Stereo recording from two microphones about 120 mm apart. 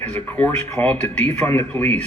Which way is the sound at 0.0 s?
15° left (ahead or behind).